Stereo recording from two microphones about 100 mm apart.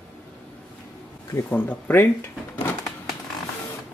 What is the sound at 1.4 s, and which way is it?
Speech, 15° left (ahead or behind).